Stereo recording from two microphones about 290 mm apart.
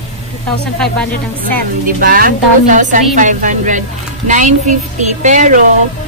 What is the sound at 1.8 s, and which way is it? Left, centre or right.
Speech, right.